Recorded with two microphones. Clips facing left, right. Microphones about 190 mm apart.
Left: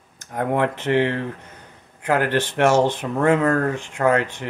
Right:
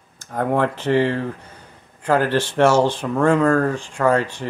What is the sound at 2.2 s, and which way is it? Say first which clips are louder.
Speech: right 1 dB; 20° left (ahead or behind).